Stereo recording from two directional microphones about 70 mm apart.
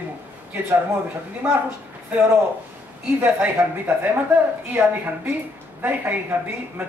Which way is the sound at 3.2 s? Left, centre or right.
Right.